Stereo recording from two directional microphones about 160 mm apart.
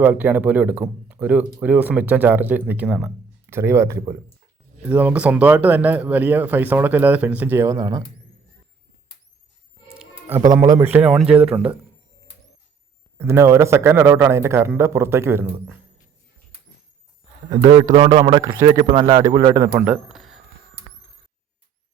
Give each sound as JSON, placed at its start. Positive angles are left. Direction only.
{"t": 0.0, "sound": "speech", "side_deg": -10}
{"t": 9.9, "sound": "music", "side_deg": -10}
{"t": 10.5, "sound": "a man's voice", "side_deg": -20}
{"t": 13.1, "sound": "speech", "side_deg": -15}
{"t": 17.9, "sound": "a man's voice", "side_deg": -30}
{"t": 19.8, "sound": "speech", "side_deg": -5}